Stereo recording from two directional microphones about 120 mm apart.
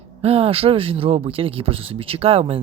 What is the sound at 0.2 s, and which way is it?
Speech, 55° right (ahead or behind).